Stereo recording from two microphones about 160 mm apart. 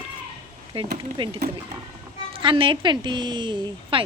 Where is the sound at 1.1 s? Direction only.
30° right (ahead or behind).